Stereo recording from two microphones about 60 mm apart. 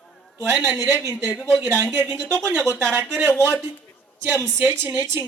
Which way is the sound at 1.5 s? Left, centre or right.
Right.